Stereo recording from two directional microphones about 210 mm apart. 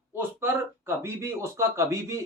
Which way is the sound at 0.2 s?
10° right (ahead or behind).